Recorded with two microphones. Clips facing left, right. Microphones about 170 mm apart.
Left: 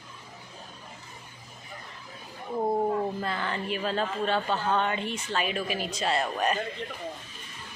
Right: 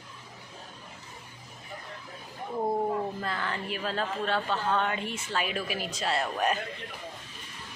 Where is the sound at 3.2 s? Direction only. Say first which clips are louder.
Left 2 dB; 5° left (ahead or behind).